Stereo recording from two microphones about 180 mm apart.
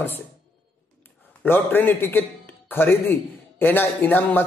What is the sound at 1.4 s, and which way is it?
A man's voice, 10° left (ahead or behind).